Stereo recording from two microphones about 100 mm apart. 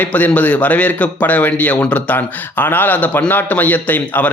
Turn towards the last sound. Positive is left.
turn(degrees=15)  # may be behind; listen again after turning